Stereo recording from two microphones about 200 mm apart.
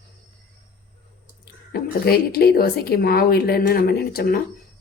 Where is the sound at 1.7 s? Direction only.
50° left (ahead or behind).